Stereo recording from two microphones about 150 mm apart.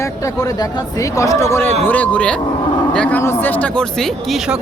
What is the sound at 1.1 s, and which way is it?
Speech, 20° left (ahead or behind).